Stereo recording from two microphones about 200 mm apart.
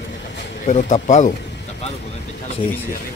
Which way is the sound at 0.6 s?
35° left (ahead or behind).